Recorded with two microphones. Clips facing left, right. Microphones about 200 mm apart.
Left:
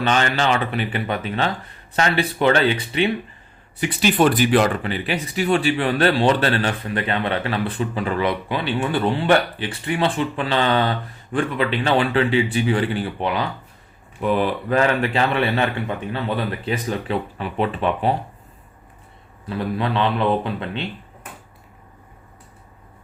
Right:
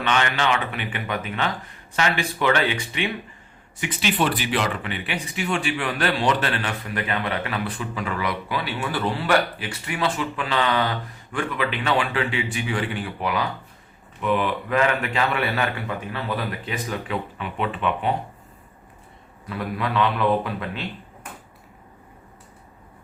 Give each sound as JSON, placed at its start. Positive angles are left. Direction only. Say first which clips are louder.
{"t": 0.0, "sound": "speech", "louder": "left 3 dB", "side_deg": 35}
{"t": 3.8, "sound": "speech", "louder": "left 6 dB", "side_deg": 45}
{"t": 19.5, "sound": "speech", "louder": "left 4 dB", "side_deg": 30}